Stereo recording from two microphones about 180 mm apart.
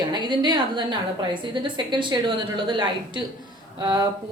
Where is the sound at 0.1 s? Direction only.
25° right (ahead or behind).